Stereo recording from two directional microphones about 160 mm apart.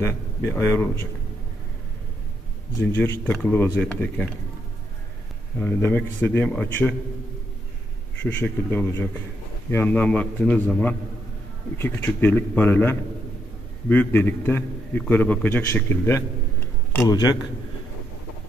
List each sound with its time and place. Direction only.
0.0 s a man's voice: 20° left (ahead or behind)
2.8 s a man's voice: 15° left (ahead or behind)
5.6 s a man's voice: 15° left (ahead or behind)
8.2 s a man's voice: 10° left (ahead or behind)